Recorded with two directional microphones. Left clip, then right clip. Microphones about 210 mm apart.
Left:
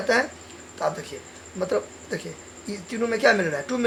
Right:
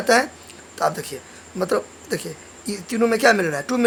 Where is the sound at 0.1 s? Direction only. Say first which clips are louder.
Right 5 dB; 30° right (ahead or behind).